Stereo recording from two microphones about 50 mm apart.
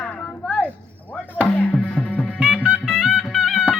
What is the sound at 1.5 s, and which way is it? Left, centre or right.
Music, left.